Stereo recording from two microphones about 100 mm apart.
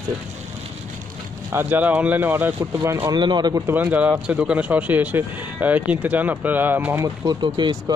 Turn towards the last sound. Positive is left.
turn(degrees=-50)  # may be behind; listen again after turning